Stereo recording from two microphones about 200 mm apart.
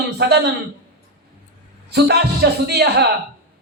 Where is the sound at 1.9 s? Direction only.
55° right (ahead or behind).